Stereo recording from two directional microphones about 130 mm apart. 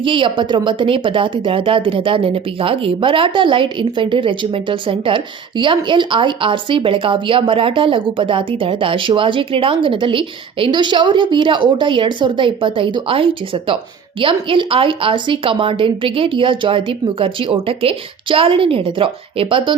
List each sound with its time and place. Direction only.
0.0 s a woman's voice: 40° right (ahead or behind)